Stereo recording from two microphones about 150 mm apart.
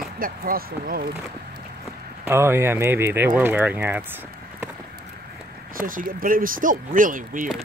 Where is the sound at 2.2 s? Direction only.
15° right (ahead or behind).